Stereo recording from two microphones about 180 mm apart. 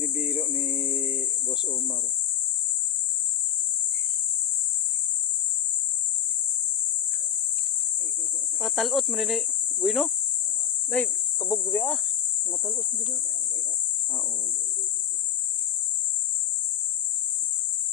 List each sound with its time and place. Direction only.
0.0 s cricket: 5° right (ahead or behind)
8.6 s speech: centre (ahead or behind)
11.3 s speech: 20° left (ahead or behind)